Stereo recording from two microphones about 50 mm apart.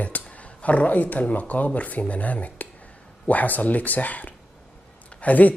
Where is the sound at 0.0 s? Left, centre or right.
Left.